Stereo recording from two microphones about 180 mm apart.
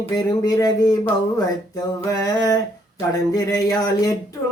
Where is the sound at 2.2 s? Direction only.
20° left (ahead or behind).